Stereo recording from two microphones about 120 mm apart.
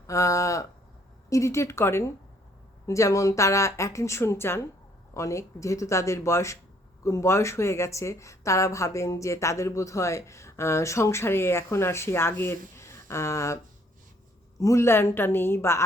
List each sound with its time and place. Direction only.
0.1 s speech: 25° left (ahead or behind)
14.6 s speech: 25° left (ahead or behind)